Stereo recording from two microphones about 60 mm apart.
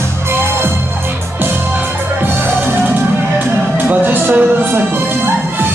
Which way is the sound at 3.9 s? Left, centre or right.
Right.